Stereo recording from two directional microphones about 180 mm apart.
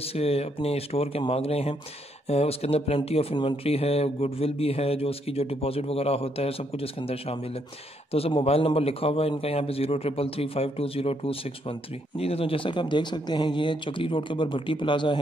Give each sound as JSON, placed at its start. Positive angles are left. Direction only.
{"t": 0.0, "sound": "speech", "side_deg": 35}